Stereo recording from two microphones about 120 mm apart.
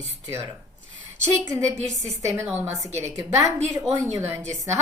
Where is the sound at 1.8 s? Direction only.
25° right (ahead or behind).